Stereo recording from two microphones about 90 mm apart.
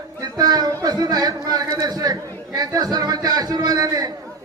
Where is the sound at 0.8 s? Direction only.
45° right (ahead or behind).